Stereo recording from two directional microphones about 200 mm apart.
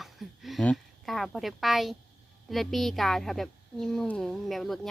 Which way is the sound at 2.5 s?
Centre (ahead or behind).